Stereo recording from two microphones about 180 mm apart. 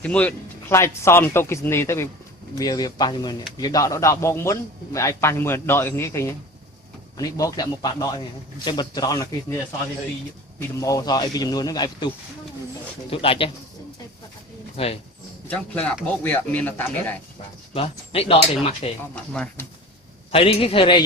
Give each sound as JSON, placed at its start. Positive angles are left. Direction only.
{"t": 0.0, "sound": "a man's voice", "side_deg": 5}
{"t": 10.6, "sound": "a man's voice", "side_deg": 20}
{"t": 14.8, "sound": "speech", "side_deg": 35}
{"t": 15.4, "sound": "speech", "side_deg": 10}
{"t": 17.7, "sound": "speech", "side_deg": 30}
{"t": 19.1, "sound": "speech", "side_deg": 5}
{"t": 20.3, "sound": "speech", "side_deg": 30}